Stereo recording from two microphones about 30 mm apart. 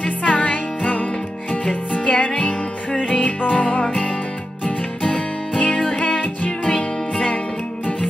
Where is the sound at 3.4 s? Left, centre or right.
Left.